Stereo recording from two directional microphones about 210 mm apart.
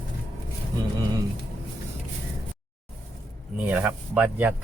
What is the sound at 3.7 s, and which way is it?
Speech, 5° right (ahead or behind).